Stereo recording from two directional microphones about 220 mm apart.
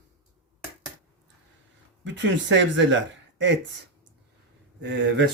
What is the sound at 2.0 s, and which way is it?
Speech, 55° right (ahead or behind).